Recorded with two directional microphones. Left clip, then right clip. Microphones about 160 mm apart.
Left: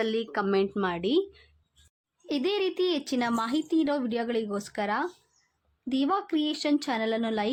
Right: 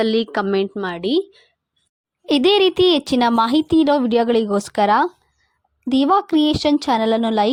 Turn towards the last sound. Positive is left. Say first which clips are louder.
# right 11 dB
turn(degrees=-40)  # may be behind; listen again after turning